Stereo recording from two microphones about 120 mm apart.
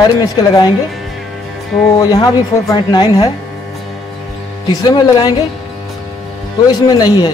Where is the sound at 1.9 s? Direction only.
35° left (ahead or behind).